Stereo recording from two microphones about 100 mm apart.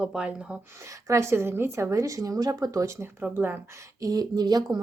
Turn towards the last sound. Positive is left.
turn(degrees=-45)  # may be behind; listen again after turning